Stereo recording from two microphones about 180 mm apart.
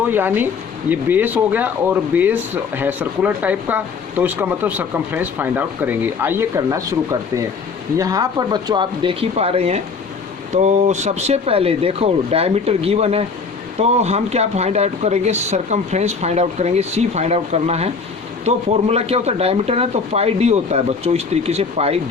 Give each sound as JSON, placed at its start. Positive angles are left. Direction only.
{"t": 0.1, "sound": "speech", "side_deg": -10}